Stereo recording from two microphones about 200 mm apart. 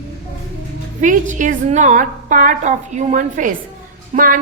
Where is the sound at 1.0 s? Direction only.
40° right (ahead or behind).